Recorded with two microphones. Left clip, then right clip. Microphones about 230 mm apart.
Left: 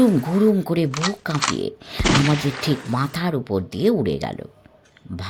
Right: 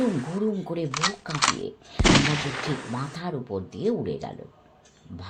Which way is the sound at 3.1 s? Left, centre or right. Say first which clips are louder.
Left 8 dB; left.